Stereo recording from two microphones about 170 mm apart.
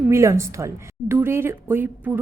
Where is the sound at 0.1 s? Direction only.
15° right (ahead or behind).